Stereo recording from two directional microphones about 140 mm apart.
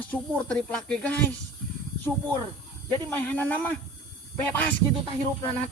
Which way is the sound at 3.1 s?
15° left (ahead or behind).